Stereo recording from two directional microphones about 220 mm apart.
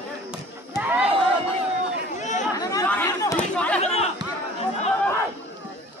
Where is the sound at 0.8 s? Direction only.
5° right (ahead or behind).